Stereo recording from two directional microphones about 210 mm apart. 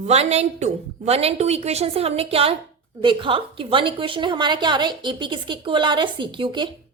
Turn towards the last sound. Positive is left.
turn(degrees=-25)  # may be behind; listen again after turning